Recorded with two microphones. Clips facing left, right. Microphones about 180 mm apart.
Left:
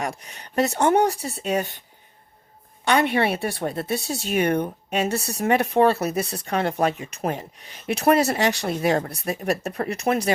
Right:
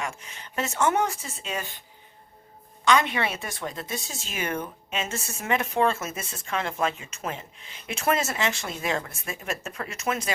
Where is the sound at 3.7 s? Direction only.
35° left (ahead or behind).